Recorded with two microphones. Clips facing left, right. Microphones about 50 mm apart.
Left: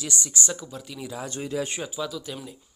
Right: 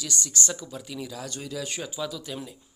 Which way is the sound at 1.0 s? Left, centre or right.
Left.